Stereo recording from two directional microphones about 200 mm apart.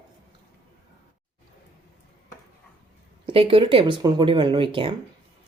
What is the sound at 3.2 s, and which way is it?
Speech, 25° right (ahead or behind).